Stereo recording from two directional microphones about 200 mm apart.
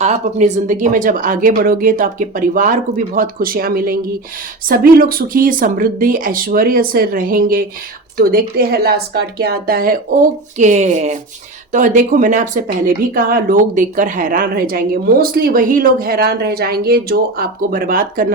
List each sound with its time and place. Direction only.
0.0 s speech: 35° right (ahead or behind)